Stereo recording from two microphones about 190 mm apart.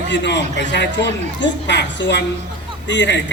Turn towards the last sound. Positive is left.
turn(degrees=70)  # may be behind; listen again after turning